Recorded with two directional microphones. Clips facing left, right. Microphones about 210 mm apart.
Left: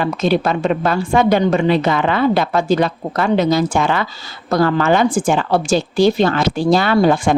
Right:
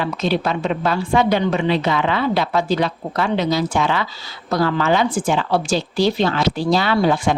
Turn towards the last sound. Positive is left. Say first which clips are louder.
# left 4 dB
turn(degrees=50)  # may be behind; listen again after turning